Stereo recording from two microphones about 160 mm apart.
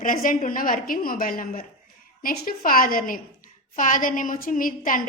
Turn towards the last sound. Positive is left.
turn(degrees=55)  # may be behind; listen again after turning